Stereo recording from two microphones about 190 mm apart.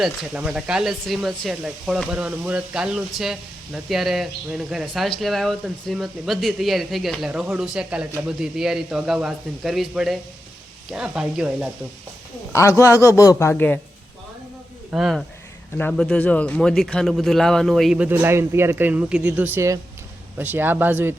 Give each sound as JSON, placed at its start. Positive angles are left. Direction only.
{"t": 0.0, "sound": "speech", "side_deg": -5}
{"t": 12.8, "sound": "speech", "side_deg": 15}
{"t": 14.8, "sound": "speech", "side_deg": 0}